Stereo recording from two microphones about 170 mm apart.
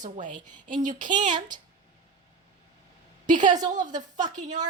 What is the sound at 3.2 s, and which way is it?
A woman's voice, 50° right (ahead or behind).